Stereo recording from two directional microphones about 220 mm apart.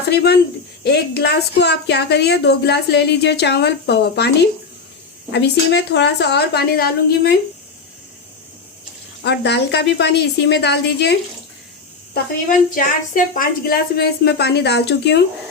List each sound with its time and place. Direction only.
0.1 s speech: 45° left (ahead or behind)
5.3 s speech: 50° left (ahead or behind)
9.2 s speech: 50° left (ahead or behind)
12.1 s speech: 40° left (ahead or behind)